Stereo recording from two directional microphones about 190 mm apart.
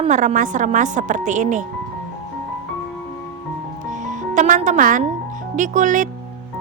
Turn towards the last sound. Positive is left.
turn(degrees=-40)  # may be behind; listen again after turning